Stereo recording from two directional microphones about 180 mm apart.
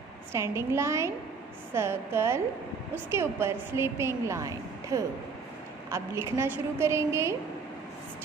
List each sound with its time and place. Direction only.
0.3 s a woman's voice: 15° right (ahead or behind)